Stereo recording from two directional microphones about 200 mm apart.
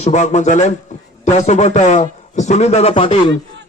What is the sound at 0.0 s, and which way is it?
A man's voice, 35° left (ahead or behind).